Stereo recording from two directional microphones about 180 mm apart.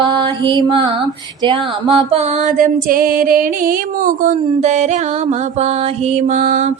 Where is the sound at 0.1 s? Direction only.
25° right (ahead or behind).